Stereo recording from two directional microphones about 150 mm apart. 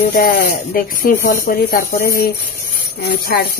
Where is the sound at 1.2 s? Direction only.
90° left.